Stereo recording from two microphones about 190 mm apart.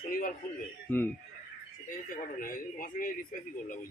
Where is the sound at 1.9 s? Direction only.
45° left (ahead or behind).